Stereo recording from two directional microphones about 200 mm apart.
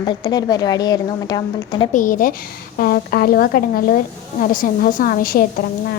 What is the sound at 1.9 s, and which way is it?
A woman's voice, 40° left (ahead or behind).